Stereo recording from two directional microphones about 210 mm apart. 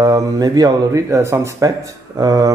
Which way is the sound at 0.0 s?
15° right (ahead or behind).